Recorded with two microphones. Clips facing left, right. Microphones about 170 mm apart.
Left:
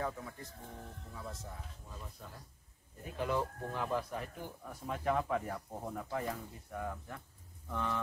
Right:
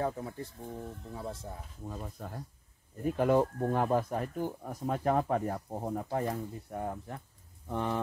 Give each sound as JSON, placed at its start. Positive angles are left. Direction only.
{"t": 0.0, "sound": "speech", "side_deg": -35}
{"t": 1.9, "sound": "speech", "side_deg": -50}